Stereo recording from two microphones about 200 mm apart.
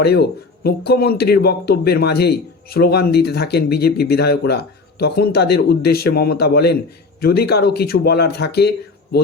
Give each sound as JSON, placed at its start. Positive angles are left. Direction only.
{"t": 0.0, "sound": "speech", "side_deg": 55}